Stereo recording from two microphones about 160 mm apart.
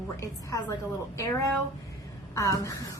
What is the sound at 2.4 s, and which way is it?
Speech, 20° left (ahead or behind).